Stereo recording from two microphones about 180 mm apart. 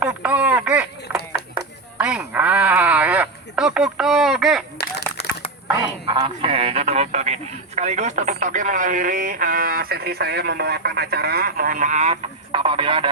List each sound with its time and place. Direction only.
0.0 s speech: 5° right (ahead or behind)
2.0 s sheep: 5° right (ahead or behind)
5.8 s a sound: 25° right (ahead or behind)
7.8 s speech: 40° right (ahead or behind)